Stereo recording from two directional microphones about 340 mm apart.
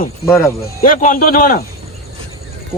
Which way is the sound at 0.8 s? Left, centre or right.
Left.